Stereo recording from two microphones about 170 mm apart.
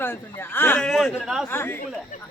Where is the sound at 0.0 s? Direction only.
10° left (ahead or behind).